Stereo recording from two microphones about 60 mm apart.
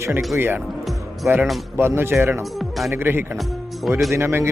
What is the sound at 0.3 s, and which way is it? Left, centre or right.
Speech, right.